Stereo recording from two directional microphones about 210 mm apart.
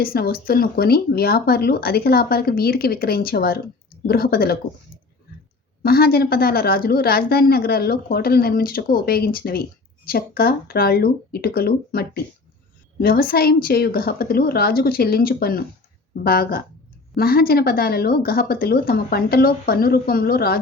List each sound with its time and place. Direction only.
0.0 s a woman's voice: 45° left (ahead or behind)
5.8 s a woman's voice: 45° left (ahead or behind)